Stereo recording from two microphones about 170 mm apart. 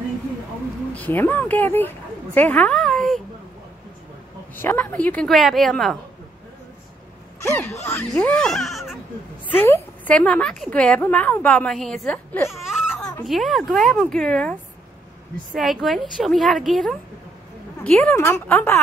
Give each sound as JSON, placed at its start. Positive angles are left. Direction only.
{"t": 0.9, "sound": "speech", "side_deg": 10}
{"t": 4.6, "sound": "a woman's voice", "side_deg": 10}
{"t": 7.3, "sound": "speech", "side_deg": 15}
{"t": 9.5, "sound": "a woman's voice", "side_deg": 15}
{"t": 12.4, "sound": "baby cry", "side_deg": 0}
{"t": 12.9, "sound": "a sound", "side_deg": 10}
{"t": 13.2, "sound": "a woman's voice", "side_deg": 0}
{"t": 18.1, "sound": "a woman's voice", "side_deg": 15}